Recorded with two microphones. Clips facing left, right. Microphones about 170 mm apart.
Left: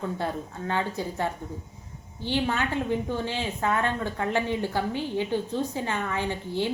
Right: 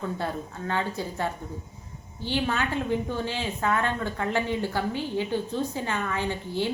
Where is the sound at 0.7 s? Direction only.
20° left (ahead or behind).